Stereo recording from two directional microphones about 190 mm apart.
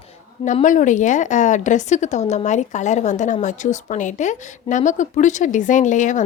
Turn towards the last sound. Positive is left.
turn(degrees=40)  # may be behind; listen again after turning